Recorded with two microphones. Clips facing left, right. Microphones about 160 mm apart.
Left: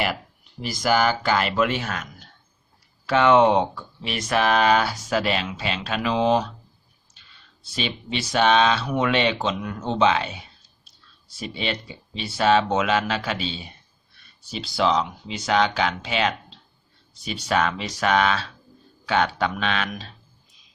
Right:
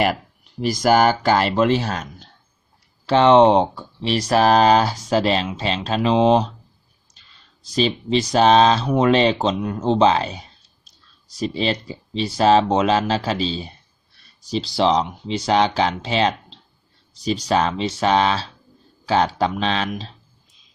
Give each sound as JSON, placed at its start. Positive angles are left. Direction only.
{"t": 0.6, "sound": "speech", "side_deg": -45}
{"t": 7.8, "sound": "speech", "side_deg": -35}